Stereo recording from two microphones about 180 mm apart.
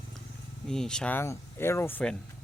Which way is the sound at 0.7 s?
5° left (ahead or behind).